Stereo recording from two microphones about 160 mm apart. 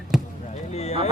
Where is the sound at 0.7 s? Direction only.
40° left (ahead or behind).